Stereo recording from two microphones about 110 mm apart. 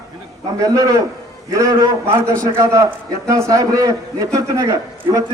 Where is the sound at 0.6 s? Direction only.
35° right (ahead or behind).